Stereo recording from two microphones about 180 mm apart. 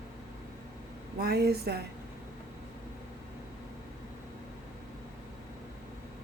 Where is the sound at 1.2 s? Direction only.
60° right (ahead or behind).